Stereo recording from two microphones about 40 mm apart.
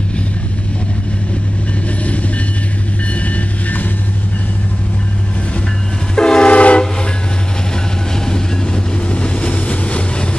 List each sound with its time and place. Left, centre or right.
6.1 s train: left
8.3 s vehicle: left